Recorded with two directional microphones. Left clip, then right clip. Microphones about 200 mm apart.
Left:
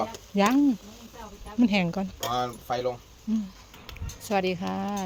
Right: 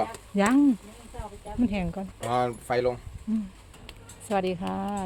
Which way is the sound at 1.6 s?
15° left (ahead or behind).